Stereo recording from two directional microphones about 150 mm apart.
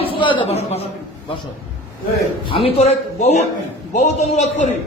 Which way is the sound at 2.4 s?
40° left (ahead or behind).